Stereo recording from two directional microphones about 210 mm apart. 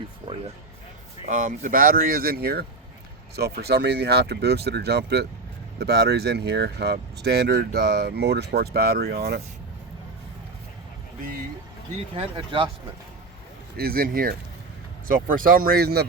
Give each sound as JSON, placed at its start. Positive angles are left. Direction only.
{"t": 1.3, "sound": "speech", "side_deg": -40}
{"t": 12.1, "sound": "speech", "side_deg": -25}
{"t": 13.7, "sound": "speech", "side_deg": -45}